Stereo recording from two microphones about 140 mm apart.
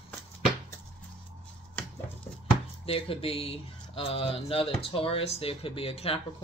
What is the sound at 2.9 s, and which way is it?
Speech, 40° left (ahead or behind).